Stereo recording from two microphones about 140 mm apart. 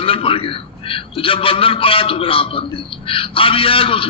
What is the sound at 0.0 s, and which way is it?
A man's voice, 40° left (ahead or behind).